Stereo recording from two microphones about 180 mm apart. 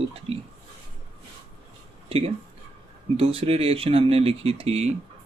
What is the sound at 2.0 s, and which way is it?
Speech, 35° right (ahead or behind).